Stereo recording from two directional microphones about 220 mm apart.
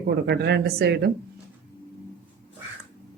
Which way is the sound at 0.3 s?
45° right (ahead or behind).